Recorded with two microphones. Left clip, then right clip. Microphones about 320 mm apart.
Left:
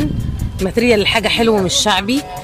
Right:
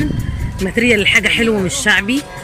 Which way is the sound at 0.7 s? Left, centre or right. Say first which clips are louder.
Right 1 dB; centre.